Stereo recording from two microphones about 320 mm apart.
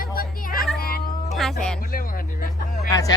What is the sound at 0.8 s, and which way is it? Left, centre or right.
Cat, left.